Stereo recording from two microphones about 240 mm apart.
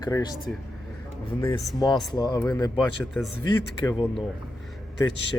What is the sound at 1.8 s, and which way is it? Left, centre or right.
A man's voice, centre.